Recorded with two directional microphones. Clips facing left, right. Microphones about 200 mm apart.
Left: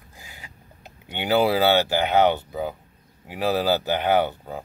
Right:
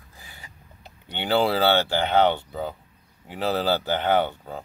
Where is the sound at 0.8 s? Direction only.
10° left (ahead or behind).